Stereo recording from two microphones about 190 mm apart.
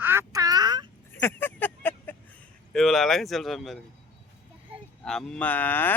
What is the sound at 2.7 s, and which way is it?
Speech, centre (ahead or behind).